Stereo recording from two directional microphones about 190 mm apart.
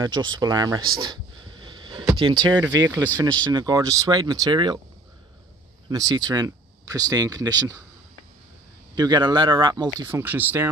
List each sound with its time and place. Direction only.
0.0 s speech: 20° right (ahead or behind)
0.9 s a sound: 25° right (ahead or behind)
2.0 s speech: 25° right (ahead or behind)
5.9 s speech: 20° right (ahead or behind)
8.9 s speech: 20° right (ahead or behind)
10.2 s speech: 10° right (ahead or behind)